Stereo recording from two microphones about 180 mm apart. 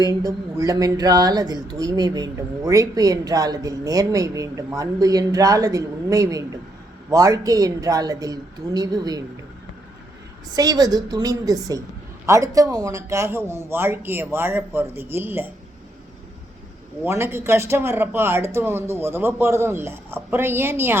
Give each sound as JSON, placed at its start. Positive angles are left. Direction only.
{"t": 0.0, "sound": "speech", "side_deg": -20}
{"t": 10.5, "sound": "speech", "side_deg": -20}
{"t": 17.0, "sound": "speech", "side_deg": -15}